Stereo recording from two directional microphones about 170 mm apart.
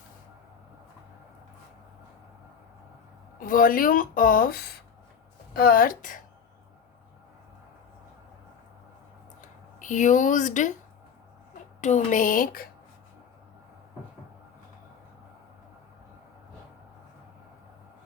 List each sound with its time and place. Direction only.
3.4 s speech: 55° left (ahead or behind)
9.4 s speech: 45° left (ahead or behind)
11.8 s a woman's voice: 45° left (ahead or behind)